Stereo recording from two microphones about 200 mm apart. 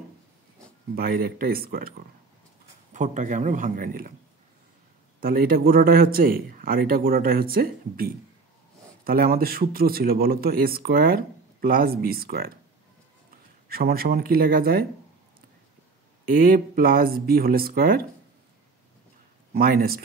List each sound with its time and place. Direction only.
0.9 s a man's voice: 50° right (ahead or behind)
2.9 s a man's voice: 35° right (ahead or behind)
5.2 s a man's voice: 45° right (ahead or behind)
13.7 s a man's voice: 50° right (ahead or behind)
16.3 s a man's voice: 45° right (ahead or behind)
19.5 s a man's voice: 45° right (ahead or behind)